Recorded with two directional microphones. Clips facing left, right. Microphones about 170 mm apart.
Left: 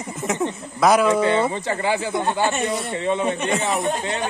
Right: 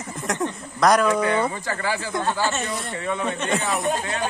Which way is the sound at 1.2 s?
25° left (ahead or behind).